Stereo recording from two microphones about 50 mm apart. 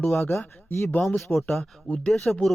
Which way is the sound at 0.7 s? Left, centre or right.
Left.